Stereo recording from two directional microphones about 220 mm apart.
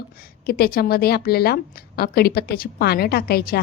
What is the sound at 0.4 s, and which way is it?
A woman's voice, 45° left (ahead or behind).